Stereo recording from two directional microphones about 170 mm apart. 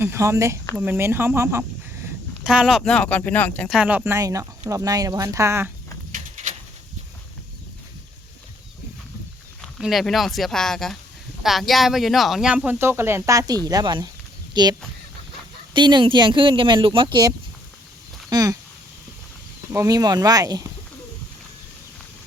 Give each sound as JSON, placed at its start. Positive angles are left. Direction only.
{"t": 0.0, "sound": "speech", "side_deg": -15}
{"t": 3.7, "sound": "speech", "side_deg": -5}
{"t": 6.1, "sound": "a sound", "side_deg": -45}
{"t": 9.6, "sound": "speech", "side_deg": 0}
{"t": 18.3, "sound": "a sound", "side_deg": -20}
{"t": 19.7, "sound": "speech", "side_deg": -20}